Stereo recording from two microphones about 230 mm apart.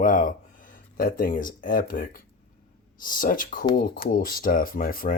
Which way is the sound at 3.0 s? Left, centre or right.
Left.